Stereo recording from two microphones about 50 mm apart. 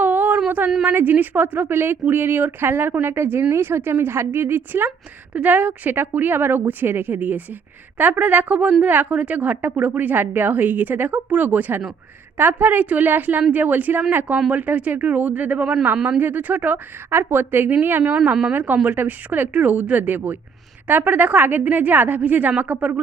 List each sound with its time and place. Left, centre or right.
0.0 s a sound: right
0.9 s a woman's voice: right
5.3 s a woman's voice: right
17.1 s a woman's voice: right
18.5 s a woman's voice: right